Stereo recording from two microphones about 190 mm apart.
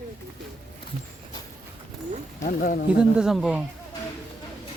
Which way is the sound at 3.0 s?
5° right (ahead or behind).